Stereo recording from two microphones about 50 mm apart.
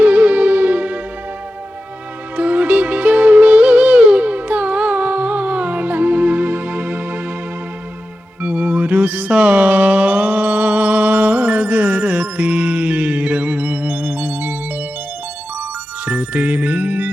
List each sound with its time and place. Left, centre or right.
0.0 s music: right
2.3 s music: right
8.4 s music: right
16.0 s music: right